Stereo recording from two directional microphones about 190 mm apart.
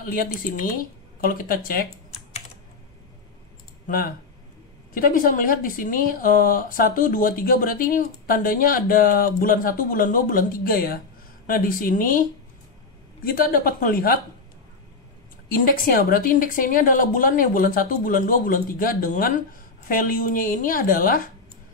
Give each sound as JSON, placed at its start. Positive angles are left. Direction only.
{"t": 0.0, "sound": "speech", "side_deg": 50}
{"t": 3.8, "sound": "speech", "side_deg": 50}
{"t": 13.2, "sound": "speech", "side_deg": 50}
{"t": 15.4, "sound": "speech", "side_deg": 50}